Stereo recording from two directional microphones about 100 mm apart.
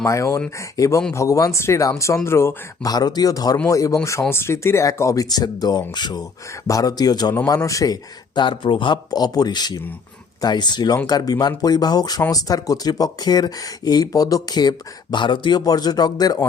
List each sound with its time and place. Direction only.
0.0 s speech: 30° left (ahead or behind)
2.8 s speech: 40° left (ahead or behind)
8.4 s speech: 55° left (ahead or behind)
9.0 s speech: 40° left (ahead or behind)